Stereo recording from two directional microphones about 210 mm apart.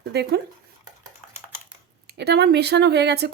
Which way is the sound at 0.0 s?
50° right (ahead or behind).